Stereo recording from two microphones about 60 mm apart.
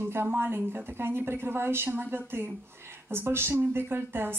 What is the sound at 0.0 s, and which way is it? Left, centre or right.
A woman's voice, right.